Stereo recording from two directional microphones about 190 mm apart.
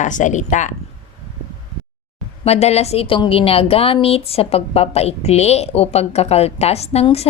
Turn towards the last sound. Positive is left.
turn(degrees=30)  # may be behind; listen again after turning